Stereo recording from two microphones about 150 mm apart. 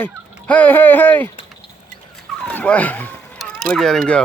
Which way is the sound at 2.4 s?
10° left (ahead or behind).